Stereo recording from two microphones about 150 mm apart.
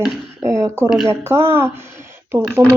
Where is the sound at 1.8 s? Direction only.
20° right (ahead or behind).